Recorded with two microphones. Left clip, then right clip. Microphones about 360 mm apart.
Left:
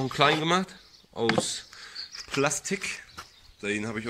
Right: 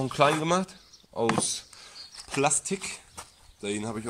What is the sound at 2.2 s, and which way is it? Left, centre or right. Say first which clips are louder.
Speech: right 1 dB; centre.